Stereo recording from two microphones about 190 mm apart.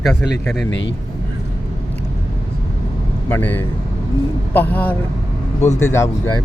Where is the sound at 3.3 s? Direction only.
10° left (ahead or behind).